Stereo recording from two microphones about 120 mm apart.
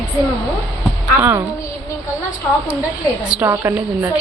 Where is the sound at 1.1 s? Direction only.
15° right (ahead or behind).